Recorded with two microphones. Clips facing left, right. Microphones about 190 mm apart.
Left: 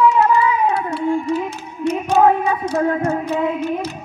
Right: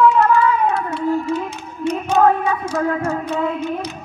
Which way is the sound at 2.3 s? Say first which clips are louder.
Left 1 dB; 30° left (ahead or behind).